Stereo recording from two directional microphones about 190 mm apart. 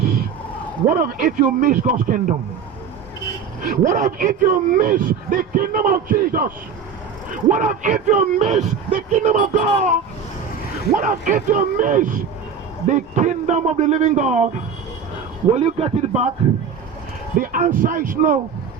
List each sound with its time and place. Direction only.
0.9 s a man's voice: 45° right (ahead or behind)
3.6 s a man's voice: 45° right (ahead or behind)
10.9 s a man's voice: 45° right (ahead or behind)
17.3 s a man's voice: 45° right (ahead or behind)